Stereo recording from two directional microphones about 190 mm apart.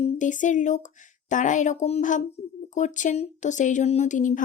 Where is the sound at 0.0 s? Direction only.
40° left (ahead or behind).